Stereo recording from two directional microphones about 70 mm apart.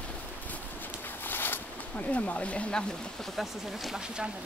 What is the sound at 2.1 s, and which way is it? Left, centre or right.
Speech, centre.